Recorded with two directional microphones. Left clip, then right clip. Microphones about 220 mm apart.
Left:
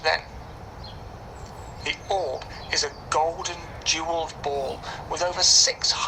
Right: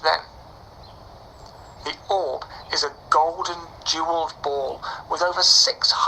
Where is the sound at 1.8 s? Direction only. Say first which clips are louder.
Right 2 dB; 30° right (ahead or behind).